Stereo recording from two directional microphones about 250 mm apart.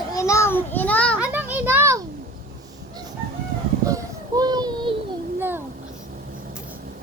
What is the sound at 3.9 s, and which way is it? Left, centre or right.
Child singing, centre.